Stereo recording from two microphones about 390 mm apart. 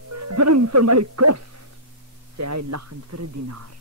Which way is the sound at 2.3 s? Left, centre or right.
Right.